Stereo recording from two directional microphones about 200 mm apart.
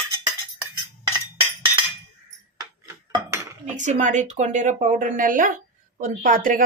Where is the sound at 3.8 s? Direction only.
35° right (ahead or behind).